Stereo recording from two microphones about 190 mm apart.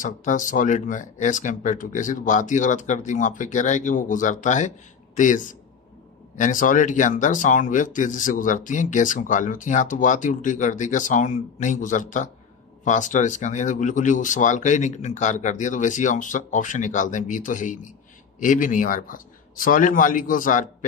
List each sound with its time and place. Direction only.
0.0 s speech: 45° left (ahead or behind)